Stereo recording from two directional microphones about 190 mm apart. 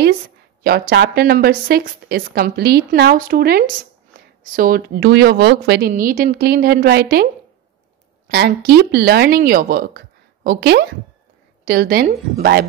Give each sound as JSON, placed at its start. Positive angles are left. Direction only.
{"t": 0.7, "sound": "a woman's voice", "side_deg": -55}
{"t": 8.3, "sound": "a woman's voice", "side_deg": -55}